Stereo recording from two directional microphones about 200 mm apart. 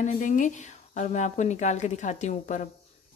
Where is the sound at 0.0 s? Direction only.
40° left (ahead or behind).